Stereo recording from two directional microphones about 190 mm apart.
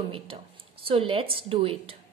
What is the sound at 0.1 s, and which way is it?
Speech, 30° right (ahead or behind).